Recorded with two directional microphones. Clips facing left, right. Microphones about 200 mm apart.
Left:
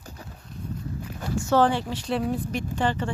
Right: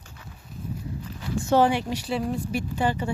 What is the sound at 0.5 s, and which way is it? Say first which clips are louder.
Walk: even; centre (ahead or behind).